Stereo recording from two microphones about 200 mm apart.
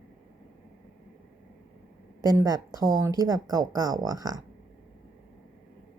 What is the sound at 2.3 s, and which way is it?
Speech, 20° right (ahead or behind).